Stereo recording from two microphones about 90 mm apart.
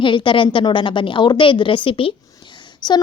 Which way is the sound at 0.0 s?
65° left (ahead or behind).